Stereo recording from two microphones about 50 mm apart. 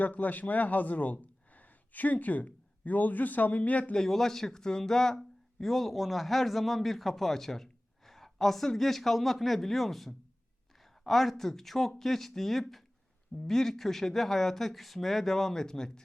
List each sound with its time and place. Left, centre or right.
0.0 s speech: left
3.9 s speech: centre